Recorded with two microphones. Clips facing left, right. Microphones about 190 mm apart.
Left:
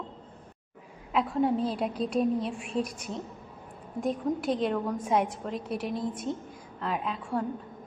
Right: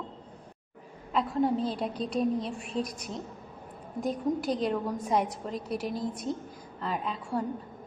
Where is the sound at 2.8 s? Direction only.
35° right (ahead or behind).